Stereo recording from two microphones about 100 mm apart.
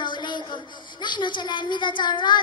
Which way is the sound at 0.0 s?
50° left (ahead or behind).